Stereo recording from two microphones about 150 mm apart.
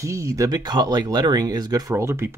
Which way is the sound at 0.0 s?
20° right (ahead or behind).